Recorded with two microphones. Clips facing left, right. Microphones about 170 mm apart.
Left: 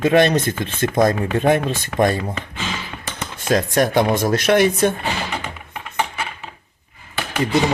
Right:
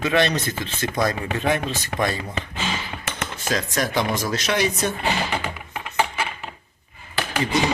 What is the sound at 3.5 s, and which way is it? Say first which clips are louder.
Speech: left 8 dB; 50° left (ahead or behind).